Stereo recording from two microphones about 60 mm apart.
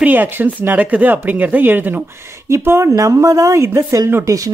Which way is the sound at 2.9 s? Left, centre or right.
Right.